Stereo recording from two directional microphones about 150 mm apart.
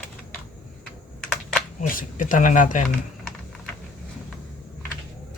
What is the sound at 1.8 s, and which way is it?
Speech, 65° left (ahead or behind).